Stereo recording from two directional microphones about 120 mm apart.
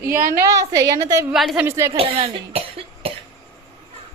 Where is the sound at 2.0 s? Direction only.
50° right (ahead or behind).